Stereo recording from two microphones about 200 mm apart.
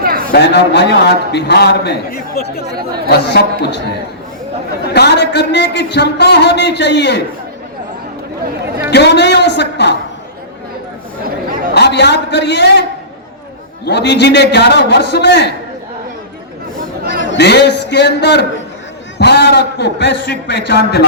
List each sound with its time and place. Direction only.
0.3 s a man's voice: 55° left (ahead or behind)
4.9 s a man's voice: 55° left (ahead or behind)
8.9 s a woman's voice: 55° left (ahead or behind)
11.7 s a man's voice: 55° left (ahead or behind)
13.8 s a man's voice: 55° left (ahead or behind)
17.1 s a man's voice: 60° left (ahead or behind)